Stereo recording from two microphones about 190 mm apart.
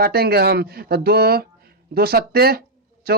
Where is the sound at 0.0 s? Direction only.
55° right (ahead or behind).